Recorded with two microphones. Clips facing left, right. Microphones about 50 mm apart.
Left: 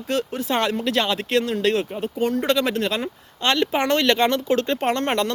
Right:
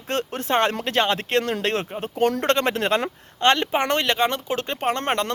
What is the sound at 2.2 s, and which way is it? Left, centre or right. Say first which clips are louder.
Speech: right 1 dB; right.